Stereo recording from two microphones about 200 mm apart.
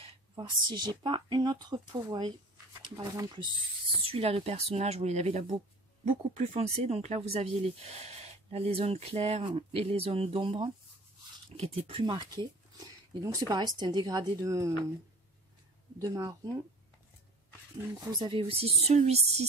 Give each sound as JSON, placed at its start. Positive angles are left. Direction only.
{"t": 0.0, "sound": "speech", "side_deg": -25}
{"t": 16.0, "sound": "speech", "side_deg": -15}
{"t": 18.1, "sound": "speech", "side_deg": -25}